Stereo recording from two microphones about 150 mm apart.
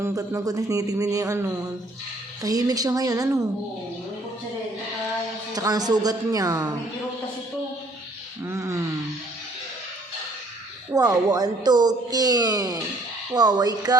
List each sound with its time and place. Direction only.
0.0 s speech: 20° right (ahead or behind)
5.5 s speech: 25° right (ahead or behind)
8.4 s speech: 20° right (ahead or behind)
10.9 s speech: 25° right (ahead or behind)